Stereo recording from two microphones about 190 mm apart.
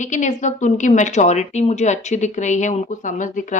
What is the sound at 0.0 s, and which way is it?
Speech, 40° left (ahead or behind).